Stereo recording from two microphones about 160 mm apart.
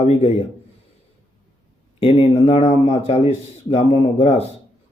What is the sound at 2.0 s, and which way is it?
Speech, 35° left (ahead or behind).